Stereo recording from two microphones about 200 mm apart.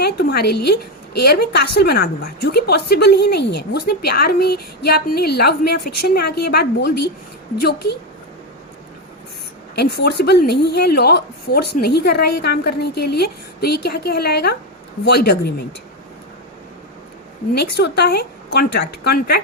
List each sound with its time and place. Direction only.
0.0 s a woman's voice: 55° left (ahead or behind)
9.7 s a woman's voice: 55° left (ahead or behind)
17.5 s speech: 55° left (ahead or behind)